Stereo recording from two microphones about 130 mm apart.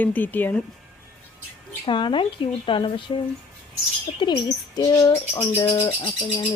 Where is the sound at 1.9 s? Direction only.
40° left (ahead or behind).